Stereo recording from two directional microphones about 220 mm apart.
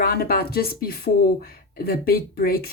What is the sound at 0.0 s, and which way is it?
Speech, 45° left (ahead or behind).